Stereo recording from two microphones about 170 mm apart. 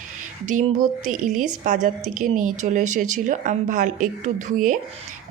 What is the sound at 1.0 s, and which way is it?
Speech, 50° right (ahead or behind).